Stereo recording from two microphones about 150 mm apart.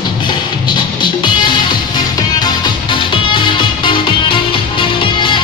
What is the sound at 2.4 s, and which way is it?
Music, 30° left (ahead or behind).